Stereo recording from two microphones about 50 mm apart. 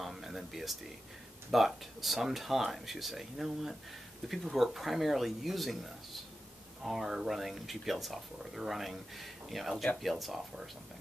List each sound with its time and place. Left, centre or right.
0.0 s a sound: centre
1.5 s speech: centre
6.8 s speech: centre